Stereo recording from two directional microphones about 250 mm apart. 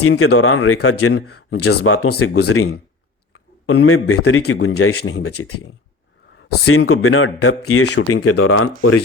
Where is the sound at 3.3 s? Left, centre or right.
Left.